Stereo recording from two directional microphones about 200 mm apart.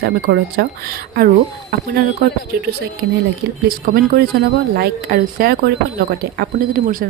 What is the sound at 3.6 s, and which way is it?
Speech, 45° right (ahead or behind).